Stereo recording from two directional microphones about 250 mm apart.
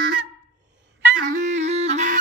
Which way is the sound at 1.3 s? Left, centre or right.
Right.